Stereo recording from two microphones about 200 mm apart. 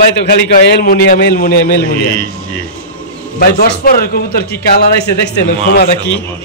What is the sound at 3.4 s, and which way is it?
A man's voice, 50° left (ahead or behind).